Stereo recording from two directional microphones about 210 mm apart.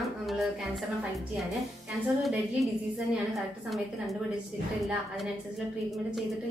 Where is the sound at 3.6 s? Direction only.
Centre (ahead or behind).